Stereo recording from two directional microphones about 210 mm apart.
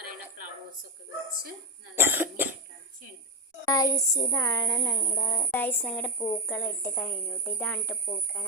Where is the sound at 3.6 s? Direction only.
15° left (ahead or behind).